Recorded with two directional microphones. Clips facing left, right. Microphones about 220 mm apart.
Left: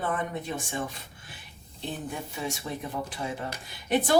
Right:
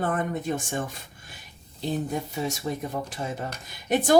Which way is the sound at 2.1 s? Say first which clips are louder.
Right 5 dB; 40° right (ahead or behind).